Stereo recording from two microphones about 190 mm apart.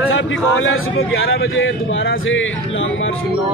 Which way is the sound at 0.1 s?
90° left.